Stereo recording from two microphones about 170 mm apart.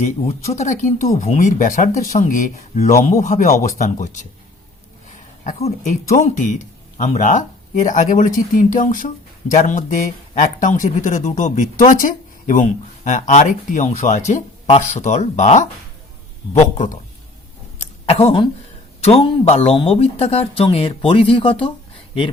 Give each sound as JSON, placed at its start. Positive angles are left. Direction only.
{"t": 0.0, "sound": "speech", "side_deg": 40}
{"t": 5.4, "sound": "speech", "side_deg": 40}
{"t": 18.0, "sound": "speech", "side_deg": 35}